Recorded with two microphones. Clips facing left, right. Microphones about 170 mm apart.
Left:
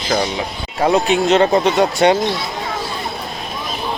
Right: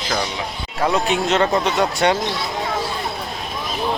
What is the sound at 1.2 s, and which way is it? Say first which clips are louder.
Speech: left 6 dB; 30° left (ahead or behind).